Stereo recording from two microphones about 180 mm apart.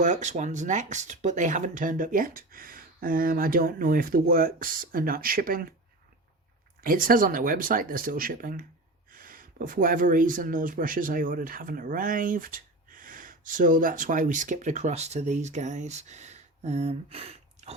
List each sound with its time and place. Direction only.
0.0 s speech: 40° right (ahead or behind)
6.8 s speech: 50° right (ahead or behind); by 17.7 s 35° right (ahead or behind)